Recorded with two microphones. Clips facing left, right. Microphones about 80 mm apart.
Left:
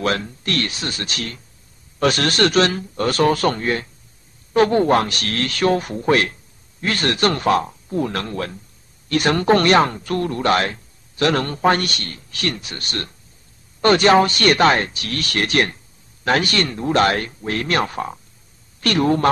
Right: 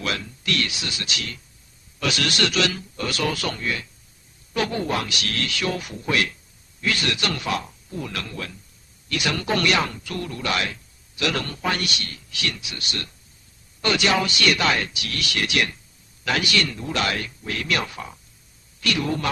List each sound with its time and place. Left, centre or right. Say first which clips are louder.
0.0 s speech: left 7 dB; left